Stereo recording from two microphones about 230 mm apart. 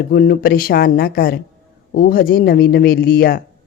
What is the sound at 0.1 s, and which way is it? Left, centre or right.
A woman's voice, left.